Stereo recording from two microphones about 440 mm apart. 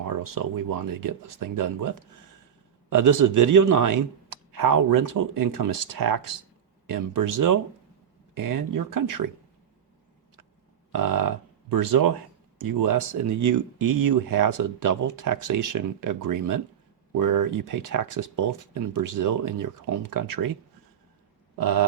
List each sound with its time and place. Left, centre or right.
0.2 s speech: right
2.9 s speech: right
10.9 s speech: right
21.6 s speech: right